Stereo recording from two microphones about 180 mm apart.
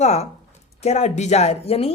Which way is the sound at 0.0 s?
40° left (ahead or behind).